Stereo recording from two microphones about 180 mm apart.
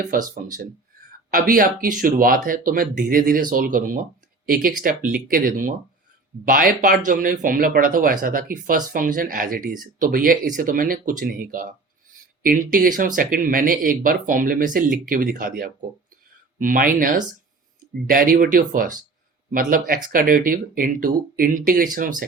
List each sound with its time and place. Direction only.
0.0 s speech: 45° right (ahead or behind)